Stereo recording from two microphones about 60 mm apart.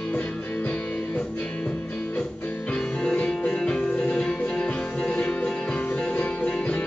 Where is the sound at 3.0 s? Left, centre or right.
Centre.